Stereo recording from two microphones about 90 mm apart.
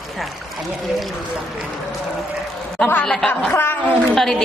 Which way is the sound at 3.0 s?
5° left (ahead or behind).